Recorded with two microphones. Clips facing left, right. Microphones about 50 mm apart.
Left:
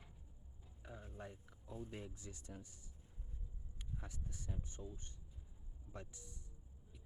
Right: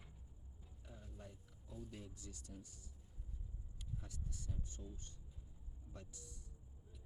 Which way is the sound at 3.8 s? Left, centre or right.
Left.